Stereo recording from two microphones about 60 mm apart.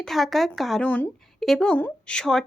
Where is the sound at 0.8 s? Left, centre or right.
Left.